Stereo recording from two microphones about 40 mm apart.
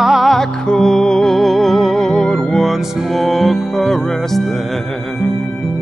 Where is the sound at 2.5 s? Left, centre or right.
Centre.